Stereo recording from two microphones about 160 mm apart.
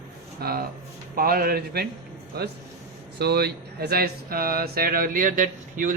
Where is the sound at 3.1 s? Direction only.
90° right.